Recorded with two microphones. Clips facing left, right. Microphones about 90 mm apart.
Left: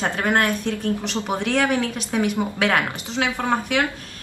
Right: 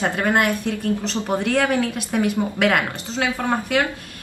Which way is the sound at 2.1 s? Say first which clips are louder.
Right 1 dB; 20° left (ahead or behind).